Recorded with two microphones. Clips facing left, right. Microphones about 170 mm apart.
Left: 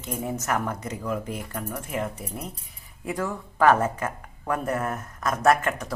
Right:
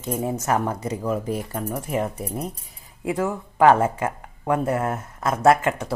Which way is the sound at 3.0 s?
25° right (ahead or behind).